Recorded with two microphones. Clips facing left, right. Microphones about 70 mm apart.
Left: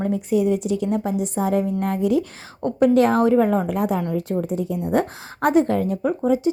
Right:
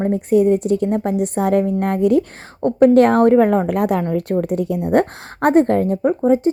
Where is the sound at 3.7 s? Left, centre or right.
Right.